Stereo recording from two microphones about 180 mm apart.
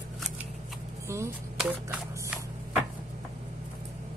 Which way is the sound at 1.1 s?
15° right (ahead or behind).